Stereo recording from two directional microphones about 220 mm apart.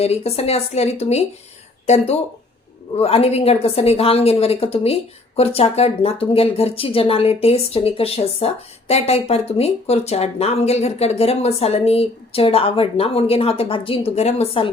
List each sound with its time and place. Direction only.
0.0 s speech: 30° left (ahead or behind)
3.0 s speech: 30° left (ahead or behind)